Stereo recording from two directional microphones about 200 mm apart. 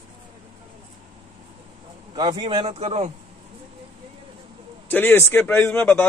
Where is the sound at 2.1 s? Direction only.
25° right (ahead or behind).